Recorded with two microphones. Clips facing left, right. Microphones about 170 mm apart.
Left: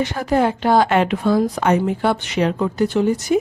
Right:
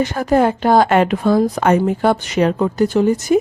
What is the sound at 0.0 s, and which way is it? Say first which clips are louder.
Speech: right 3 dB; 45° right (ahead or behind).